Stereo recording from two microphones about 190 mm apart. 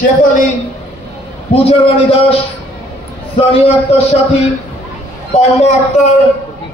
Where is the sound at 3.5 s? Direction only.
30° left (ahead or behind).